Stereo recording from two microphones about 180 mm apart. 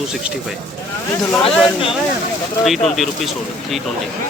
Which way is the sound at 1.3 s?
5° left (ahead or behind).